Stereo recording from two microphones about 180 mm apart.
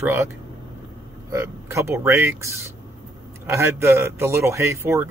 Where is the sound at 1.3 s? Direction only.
15° right (ahead or behind).